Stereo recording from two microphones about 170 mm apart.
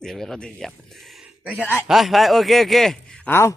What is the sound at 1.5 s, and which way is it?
Speech, 10° left (ahead or behind).